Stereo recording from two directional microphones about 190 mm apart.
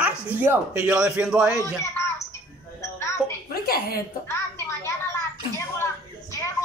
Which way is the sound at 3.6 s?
55° left (ahead or behind).